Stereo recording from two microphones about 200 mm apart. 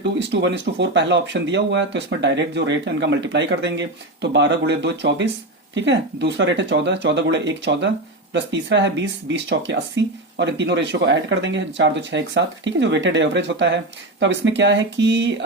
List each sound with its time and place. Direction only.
0.2 s speech: 60° right (ahead or behind)